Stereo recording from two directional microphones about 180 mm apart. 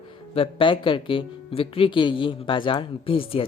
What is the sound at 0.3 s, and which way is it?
Speech, 30° left (ahead or behind).